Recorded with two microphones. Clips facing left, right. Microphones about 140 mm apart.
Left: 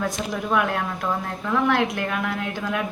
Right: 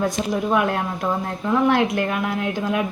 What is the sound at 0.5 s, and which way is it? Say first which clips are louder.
Speech: even; 25° right (ahead or behind).